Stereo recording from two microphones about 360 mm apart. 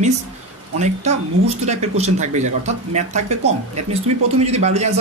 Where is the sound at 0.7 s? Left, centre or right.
Centre.